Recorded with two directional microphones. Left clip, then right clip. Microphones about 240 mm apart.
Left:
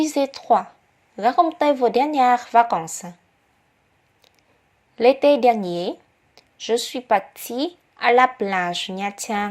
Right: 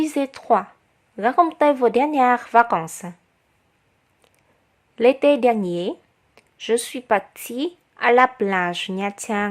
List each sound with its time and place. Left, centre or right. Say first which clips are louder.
0.0 s a woman's voice: left 2 dB; centre
4.9 s a woman's voice: left 1 dB; centre